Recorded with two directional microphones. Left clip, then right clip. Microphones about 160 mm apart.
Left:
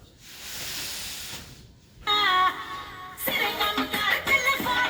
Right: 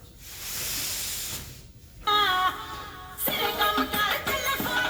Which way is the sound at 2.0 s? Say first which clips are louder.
Left 1 dB; 35° right (ahead or behind).